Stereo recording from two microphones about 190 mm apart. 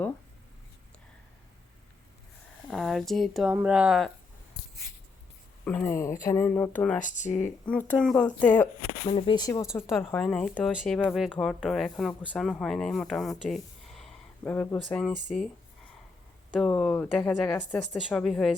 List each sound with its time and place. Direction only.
2.6 s speech: centre (ahead or behind)
5.6 s speech: 10° left (ahead or behind)
7.0 s speech: 40° left (ahead or behind)
7.3 s speech: 5° left (ahead or behind)
9.0 s speech: 25° left (ahead or behind)
9.9 s speech: 10° left (ahead or behind)
16.5 s speech: centre (ahead or behind)